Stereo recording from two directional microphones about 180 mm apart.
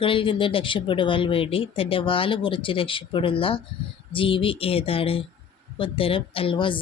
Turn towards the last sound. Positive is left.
turn(degrees=30)  # may be behind; listen again after turning